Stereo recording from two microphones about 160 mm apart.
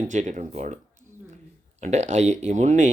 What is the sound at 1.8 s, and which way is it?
Speech, 45° right (ahead or behind).